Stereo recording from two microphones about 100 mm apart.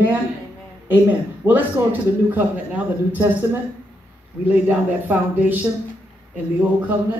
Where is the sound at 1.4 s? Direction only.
20° right (ahead or behind).